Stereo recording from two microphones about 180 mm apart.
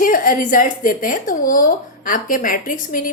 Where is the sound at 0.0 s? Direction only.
50° left (ahead or behind).